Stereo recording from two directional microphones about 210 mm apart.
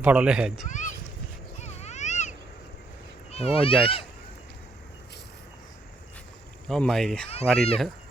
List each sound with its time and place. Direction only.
0.0 s speech: 5° right (ahead or behind)
0.7 s a sound: 35° left (ahead or behind)
3.3 s speech: 30° left (ahead or behind)
6.7 s speech: 5° left (ahead or behind)